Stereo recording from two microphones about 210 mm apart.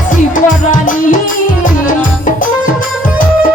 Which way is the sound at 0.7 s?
40° left (ahead or behind).